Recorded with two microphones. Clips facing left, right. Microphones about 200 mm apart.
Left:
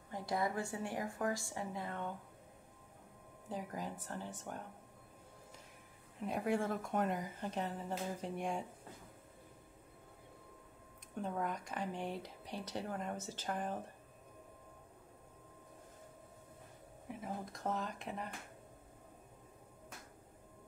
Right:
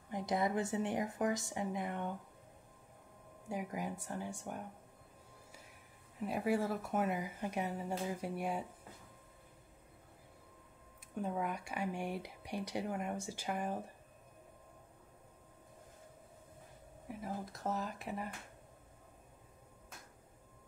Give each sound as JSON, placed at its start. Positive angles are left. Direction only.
{"t": 0.1, "sound": "a woman's voice", "side_deg": -20}
{"t": 3.4, "sound": "speech", "side_deg": -10}
{"t": 6.1, "sound": "speech", "side_deg": -5}
{"t": 11.1, "sound": "speech", "side_deg": -5}
{"t": 17.1, "sound": "speech", "side_deg": 0}